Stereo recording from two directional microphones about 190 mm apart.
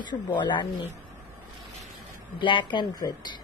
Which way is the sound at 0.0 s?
25° left (ahead or behind).